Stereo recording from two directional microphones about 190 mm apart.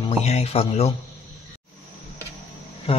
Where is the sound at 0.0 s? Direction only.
35° left (ahead or behind).